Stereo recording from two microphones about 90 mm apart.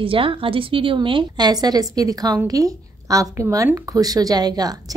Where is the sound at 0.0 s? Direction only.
80° right.